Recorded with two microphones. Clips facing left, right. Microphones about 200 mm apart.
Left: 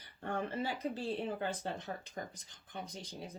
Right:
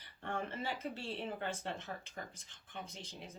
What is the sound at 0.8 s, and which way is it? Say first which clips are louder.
Speech: left 5 dB; 35° left (ahead or behind).